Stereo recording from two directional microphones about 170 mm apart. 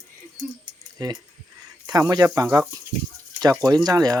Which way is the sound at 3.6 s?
20° right (ahead or behind).